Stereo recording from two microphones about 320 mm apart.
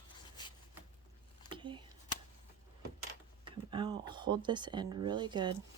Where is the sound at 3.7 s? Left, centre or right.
Centre.